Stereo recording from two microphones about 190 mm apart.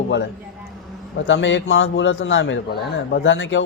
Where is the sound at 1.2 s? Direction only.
75° left (ahead or behind).